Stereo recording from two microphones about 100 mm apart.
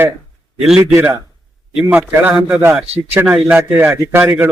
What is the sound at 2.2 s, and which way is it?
A man's voice, 15° right (ahead or behind).